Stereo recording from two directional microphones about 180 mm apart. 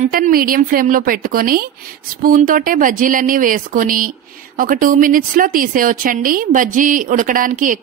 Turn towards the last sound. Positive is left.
turn(degrees=-45)  # may be behind; listen again after turning